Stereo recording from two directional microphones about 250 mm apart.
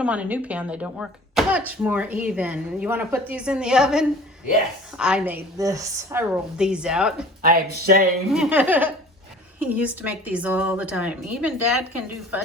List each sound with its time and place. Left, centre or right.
0.0 s a woman's voice: centre
7.4 s speech: right
8.3 s a woman's voice: centre